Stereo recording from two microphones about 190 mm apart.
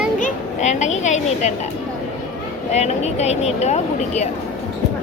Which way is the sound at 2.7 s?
35° left (ahead or behind).